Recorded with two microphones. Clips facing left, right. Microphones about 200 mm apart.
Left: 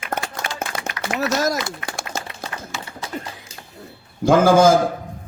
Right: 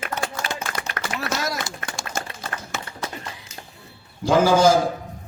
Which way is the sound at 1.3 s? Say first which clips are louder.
Left 7 dB; 50° left (ahead or behind).